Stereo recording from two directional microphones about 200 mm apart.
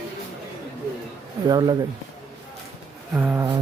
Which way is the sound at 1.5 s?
20° right (ahead or behind).